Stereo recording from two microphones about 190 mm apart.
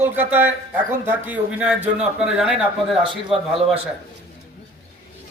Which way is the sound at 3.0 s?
30° right (ahead or behind).